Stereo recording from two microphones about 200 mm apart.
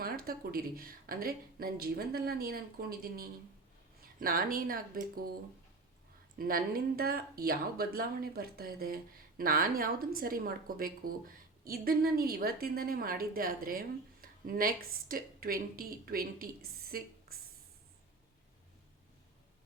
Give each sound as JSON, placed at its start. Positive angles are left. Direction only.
{"t": 0.0, "sound": "a woman's voice", "side_deg": -50}
{"t": 6.4, "sound": "a woman's voice", "side_deg": -45}